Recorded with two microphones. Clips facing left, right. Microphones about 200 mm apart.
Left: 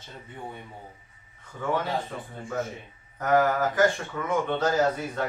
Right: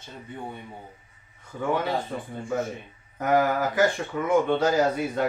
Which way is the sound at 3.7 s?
15° right (ahead or behind).